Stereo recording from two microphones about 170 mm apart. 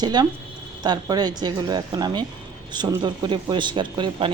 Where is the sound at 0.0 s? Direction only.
25° right (ahead or behind).